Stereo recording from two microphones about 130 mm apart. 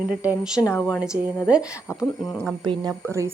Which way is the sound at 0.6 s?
20° left (ahead or behind).